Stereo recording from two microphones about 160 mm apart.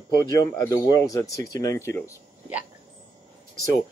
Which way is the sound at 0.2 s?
25° left (ahead or behind).